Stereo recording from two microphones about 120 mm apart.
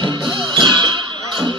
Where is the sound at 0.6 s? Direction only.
40° right (ahead or behind).